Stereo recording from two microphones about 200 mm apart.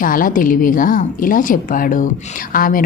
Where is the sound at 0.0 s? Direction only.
45° left (ahead or behind).